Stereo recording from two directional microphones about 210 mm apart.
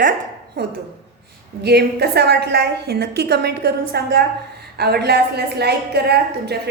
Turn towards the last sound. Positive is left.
turn(degrees=-50)  # may be behind; listen again after turning